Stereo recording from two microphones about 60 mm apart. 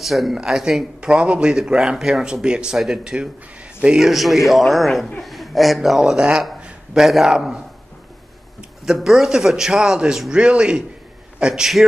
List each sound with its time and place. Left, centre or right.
0.0 s a man's voice: centre
6.6 s a sound: centre
7.2 s a man's voice: centre
8.8 s a man's voice: centre